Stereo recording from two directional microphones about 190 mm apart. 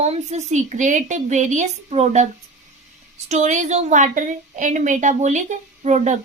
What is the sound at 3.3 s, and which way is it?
A woman's voice, 40° right (ahead or behind).